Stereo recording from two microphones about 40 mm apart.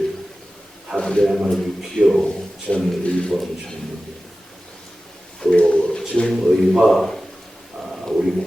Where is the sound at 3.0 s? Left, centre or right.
Left.